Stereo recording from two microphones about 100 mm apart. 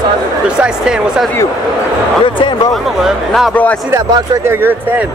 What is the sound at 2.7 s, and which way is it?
Speech, centre (ahead or behind).